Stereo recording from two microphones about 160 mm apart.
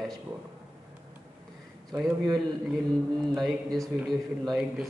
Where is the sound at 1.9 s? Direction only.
Centre (ahead or behind).